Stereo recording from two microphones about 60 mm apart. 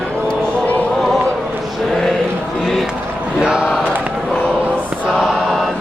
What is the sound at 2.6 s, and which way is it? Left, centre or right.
Run, centre.